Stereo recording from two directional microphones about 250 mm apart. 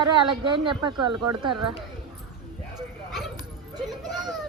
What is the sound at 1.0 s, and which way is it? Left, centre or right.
Speech, right.